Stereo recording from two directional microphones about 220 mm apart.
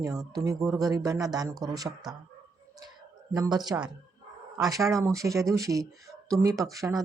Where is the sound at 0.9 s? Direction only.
15° right (ahead or behind).